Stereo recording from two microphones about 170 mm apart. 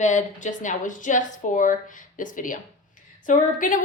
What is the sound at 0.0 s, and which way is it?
A woman's voice, 45° left (ahead or behind).